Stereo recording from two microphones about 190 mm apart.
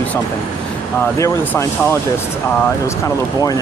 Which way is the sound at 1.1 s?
15° left (ahead or behind).